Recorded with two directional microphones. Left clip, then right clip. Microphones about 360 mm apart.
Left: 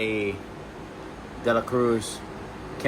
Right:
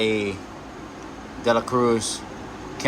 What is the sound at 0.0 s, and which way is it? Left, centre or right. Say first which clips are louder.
Speech: right 4 dB; right.